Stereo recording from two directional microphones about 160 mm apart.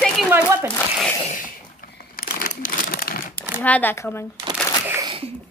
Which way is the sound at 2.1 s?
70° left (ahead or behind).